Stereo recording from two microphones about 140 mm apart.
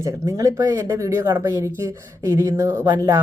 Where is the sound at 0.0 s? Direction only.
25° right (ahead or behind).